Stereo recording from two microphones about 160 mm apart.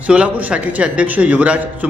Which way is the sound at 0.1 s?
5° right (ahead or behind).